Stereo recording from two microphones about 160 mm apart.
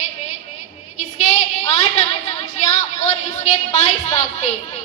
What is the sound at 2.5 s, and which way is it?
A woman's voice, 45° left (ahead or behind).